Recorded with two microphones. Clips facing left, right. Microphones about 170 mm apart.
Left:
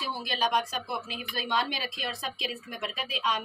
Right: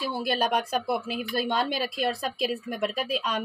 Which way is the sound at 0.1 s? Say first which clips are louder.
Right 2 dB; 60° right (ahead or behind).